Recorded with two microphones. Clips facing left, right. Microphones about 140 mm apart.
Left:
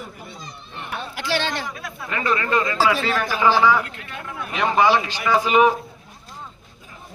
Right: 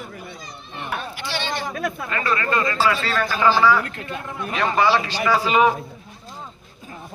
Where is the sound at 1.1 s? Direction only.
90° left.